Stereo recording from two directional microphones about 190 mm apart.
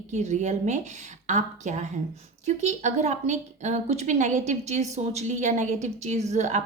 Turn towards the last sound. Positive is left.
turn(degrees=-40)  # may be behind; listen again after turning